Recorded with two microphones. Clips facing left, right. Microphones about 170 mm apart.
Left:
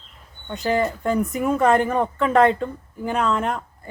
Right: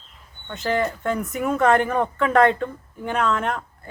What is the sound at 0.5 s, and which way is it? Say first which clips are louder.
Speech: left 2 dB; centre (ahead or behind).